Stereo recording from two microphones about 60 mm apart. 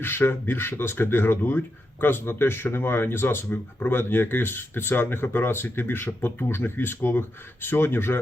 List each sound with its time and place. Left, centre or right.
0.0 s speech: left